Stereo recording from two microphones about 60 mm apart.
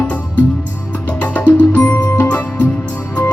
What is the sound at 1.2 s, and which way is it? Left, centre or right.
Music, left.